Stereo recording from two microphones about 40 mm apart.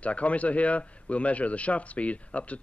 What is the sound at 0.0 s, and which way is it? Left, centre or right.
A man's voice, left.